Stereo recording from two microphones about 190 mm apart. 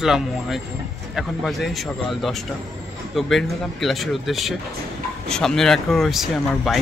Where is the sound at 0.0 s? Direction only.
Centre (ahead or behind).